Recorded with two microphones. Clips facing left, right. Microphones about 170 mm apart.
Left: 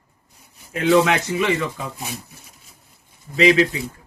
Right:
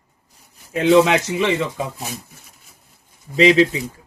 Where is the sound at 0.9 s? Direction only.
20° right (ahead or behind).